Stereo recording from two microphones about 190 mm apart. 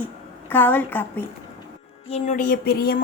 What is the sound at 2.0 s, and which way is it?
Speech, 30° left (ahead or behind).